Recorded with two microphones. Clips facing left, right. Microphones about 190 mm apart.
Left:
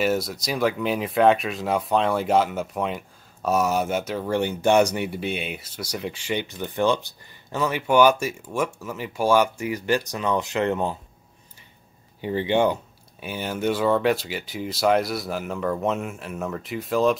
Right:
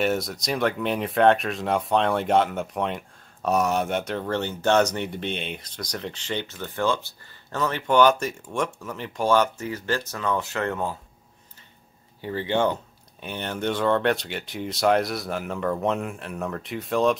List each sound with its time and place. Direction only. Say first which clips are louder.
0.0 s speech: left 1 dB; centre (ahead or behind); by 11.0 s 20° left (ahead or behind)
12.2 s speech: left 3 dB; 15° left (ahead or behind); by 17.2 s centre (ahead or behind)